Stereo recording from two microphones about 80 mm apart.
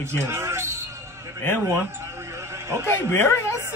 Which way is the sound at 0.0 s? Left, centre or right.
Right.